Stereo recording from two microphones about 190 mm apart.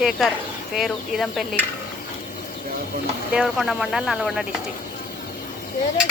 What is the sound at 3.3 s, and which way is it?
Speech, centre (ahead or behind).